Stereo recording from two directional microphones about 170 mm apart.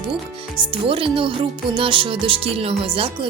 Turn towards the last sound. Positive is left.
turn(degrees=-30)  # may be behind; listen again after turning